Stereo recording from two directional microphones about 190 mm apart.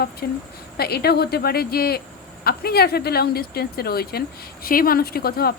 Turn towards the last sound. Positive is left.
turn(degrees=55)  # may be behind; listen again after turning